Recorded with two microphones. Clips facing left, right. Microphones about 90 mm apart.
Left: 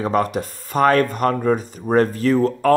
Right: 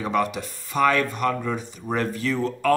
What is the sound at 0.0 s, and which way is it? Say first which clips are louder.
Speech: left 4 dB; 40° left (ahead or behind).